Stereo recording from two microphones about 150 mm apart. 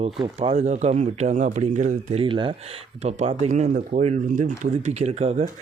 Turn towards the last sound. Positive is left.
turn(degrees=-50)  # may be behind; listen again after turning